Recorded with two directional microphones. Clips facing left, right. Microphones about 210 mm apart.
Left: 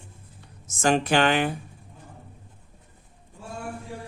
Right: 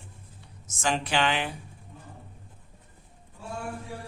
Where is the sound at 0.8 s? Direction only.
45° left (ahead or behind).